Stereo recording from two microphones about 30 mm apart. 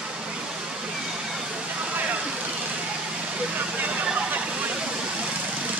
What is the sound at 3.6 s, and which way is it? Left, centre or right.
Vehicle, right.